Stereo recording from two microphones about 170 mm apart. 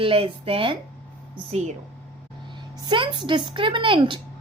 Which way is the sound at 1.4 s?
45° right (ahead or behind).